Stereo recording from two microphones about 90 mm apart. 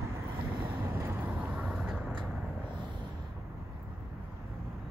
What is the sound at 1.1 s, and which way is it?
Vehicle, 15° right (ahead or behind).